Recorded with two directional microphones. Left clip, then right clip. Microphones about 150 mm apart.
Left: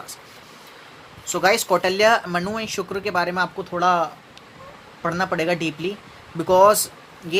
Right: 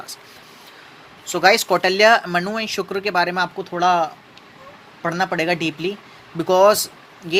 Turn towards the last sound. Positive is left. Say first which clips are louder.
# right 3 dB
turn(degrees=-20)  # may be behind; listen again after turning